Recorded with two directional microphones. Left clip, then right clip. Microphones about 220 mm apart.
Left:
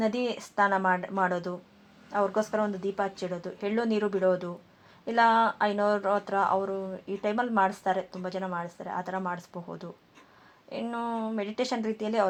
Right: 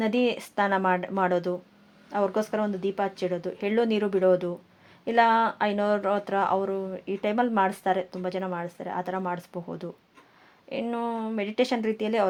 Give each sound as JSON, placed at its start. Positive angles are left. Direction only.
{"t": 0.0, "sound": "speech", "side_deg": -40}